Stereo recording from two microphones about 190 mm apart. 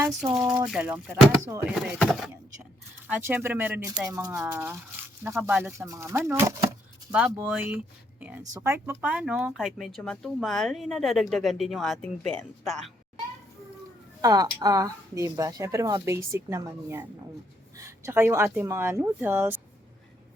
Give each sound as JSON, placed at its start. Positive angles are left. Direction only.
{"t": 0.7, "sound": "speech", "side_deg": -5}
{"t": 3.1, "sound": "speech", "side_deg": -10}
{"t": 14.2, "sound": "speech", "side_deg": -20}